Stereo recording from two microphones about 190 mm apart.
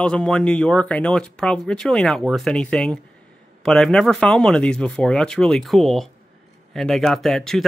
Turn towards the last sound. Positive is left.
turn(degrees=5)  # may be behind; listen again after turning